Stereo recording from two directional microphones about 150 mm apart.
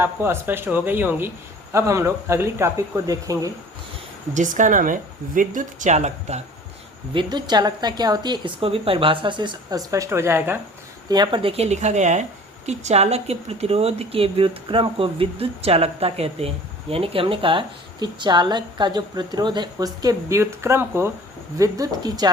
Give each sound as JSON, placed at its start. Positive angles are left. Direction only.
{"t": 0.0, "sound": "a woman's voice", "side_deg": -15}
{"t": 4.4, "sound": "speech", "side_deg": -60}
{"t": 7.1, "sound": "a woman's voice", "side_deg": -30}
{"t": 11.1, "sound": "a woman's voice", "side_deg": -30}